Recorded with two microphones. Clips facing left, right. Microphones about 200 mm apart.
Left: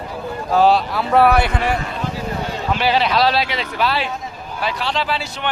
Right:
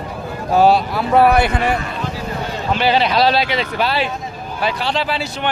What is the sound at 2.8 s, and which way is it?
Speech, 5° left (ahead or behind).